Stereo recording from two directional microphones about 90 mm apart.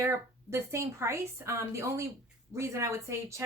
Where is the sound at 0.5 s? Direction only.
30° right (ahead or behind).